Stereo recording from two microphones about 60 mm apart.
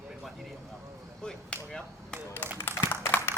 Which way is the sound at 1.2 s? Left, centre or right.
Centre.